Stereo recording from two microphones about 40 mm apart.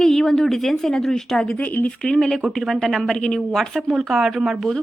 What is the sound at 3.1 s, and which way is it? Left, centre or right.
Speech, centre.